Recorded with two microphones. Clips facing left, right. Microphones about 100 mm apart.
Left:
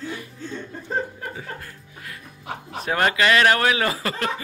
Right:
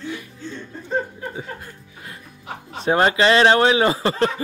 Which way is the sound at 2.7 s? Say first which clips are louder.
Right 4 dB; 25° right (ahead or behind).